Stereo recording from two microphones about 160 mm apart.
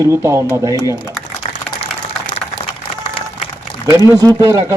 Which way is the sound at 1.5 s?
50° left (ahead or behind).